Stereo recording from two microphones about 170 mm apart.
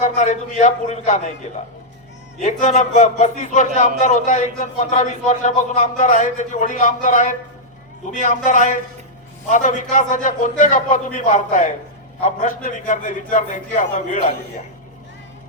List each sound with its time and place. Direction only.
0.0 s speech: 45° left (ahead or behind)
2.4 s speech: 45° left (ahead or behind)